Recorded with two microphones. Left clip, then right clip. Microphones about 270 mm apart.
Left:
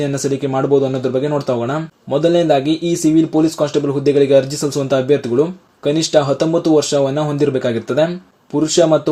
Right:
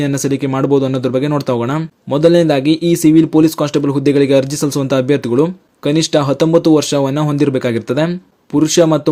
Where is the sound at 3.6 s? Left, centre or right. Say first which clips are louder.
Right 1 dB; right.